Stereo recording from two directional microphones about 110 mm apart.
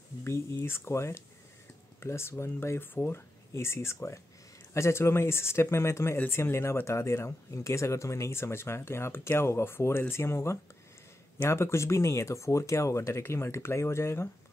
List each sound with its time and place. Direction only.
0.2 s speech: 25° left (ahead or behind)